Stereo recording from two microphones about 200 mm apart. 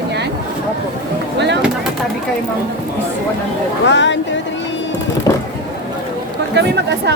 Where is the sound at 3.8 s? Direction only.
65° left (ahead or behind).